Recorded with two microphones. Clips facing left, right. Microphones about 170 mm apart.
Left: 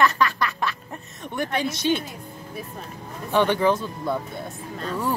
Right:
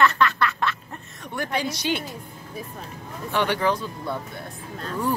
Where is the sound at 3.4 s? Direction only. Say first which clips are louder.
Left 3 dB; 20° left (ahead or behind).